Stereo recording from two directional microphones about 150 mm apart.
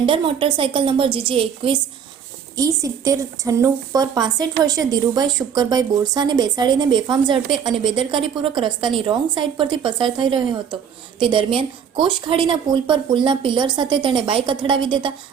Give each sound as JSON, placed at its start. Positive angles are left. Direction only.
{"t": 0.0, "sound": "a woman's voice", "side_deg": -35}
{"t": 2.6, "sound": "a woman's voice", "side_deg": -25}